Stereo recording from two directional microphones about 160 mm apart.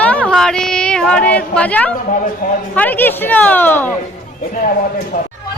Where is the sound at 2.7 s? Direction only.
10° left (ahead or behind).